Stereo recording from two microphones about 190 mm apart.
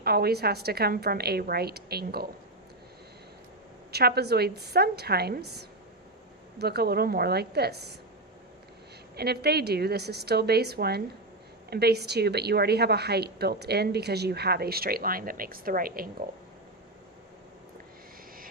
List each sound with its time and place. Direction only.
0.0 s a woman's voice: 55° right (ahead or behind)
3.9 s a woman's voice: 55° right (ahead or behind)
9.1 s a woman's voice: 55° right (ahead or behind)